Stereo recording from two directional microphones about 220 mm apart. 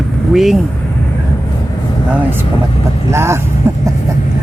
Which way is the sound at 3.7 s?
10° right (ahead or behind).